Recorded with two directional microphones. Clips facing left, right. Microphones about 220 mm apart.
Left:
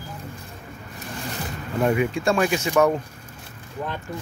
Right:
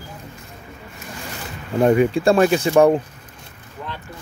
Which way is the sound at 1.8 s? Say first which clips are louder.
Right 6 dB; 35° right (ahead or behind).